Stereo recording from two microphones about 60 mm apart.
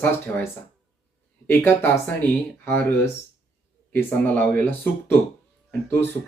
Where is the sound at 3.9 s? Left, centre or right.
Left.